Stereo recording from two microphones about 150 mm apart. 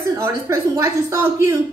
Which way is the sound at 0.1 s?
20° right (ahead or behind).